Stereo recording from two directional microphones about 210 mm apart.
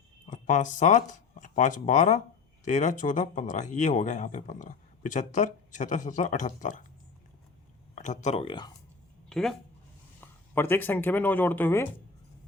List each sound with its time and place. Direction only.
0.3 s speech: 35° left (ahead or behind)
7.9 s speech: 35° left (ahead or behind)
9.3 s speech: centre (ahead or behind)